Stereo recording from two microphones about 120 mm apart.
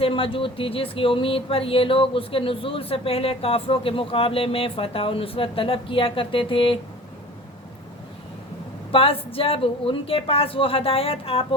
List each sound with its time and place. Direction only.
0.0 s speech: 50° left (ahead or behind)
8.9 s speech: 50° left (ahead or behind)